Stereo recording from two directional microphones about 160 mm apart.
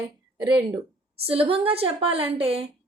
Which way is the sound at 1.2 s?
35° right (ahead or behind).